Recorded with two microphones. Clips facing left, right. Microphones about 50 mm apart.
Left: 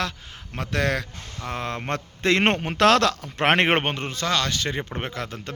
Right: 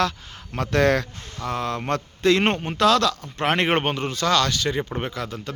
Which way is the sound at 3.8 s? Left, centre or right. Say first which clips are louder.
Right 3 dB; left.